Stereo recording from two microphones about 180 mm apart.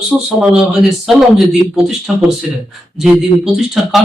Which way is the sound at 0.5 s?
5° right (ahead or behind).